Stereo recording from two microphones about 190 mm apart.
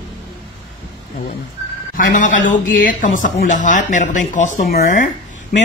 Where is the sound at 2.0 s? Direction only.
45° left (ahead or behind).